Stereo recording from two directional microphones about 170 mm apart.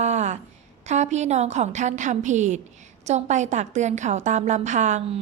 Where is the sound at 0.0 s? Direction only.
40° right (ahead or behind).